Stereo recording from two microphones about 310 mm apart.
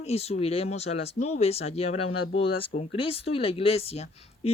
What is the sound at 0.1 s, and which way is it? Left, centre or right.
Speech, centre.